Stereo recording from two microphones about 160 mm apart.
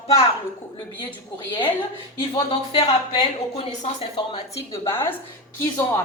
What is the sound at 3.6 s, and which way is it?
Speech, 35° left (ahead or behind).